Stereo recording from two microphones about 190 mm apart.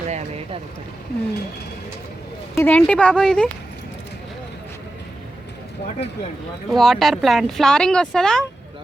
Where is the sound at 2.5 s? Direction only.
10° left (ahead or behind).